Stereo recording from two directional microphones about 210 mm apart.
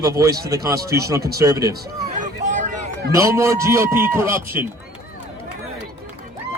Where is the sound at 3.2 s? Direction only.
15° right (ahead or behind).